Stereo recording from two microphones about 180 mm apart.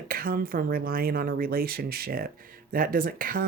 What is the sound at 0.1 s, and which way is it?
Speech, 55° right (ahead or behind).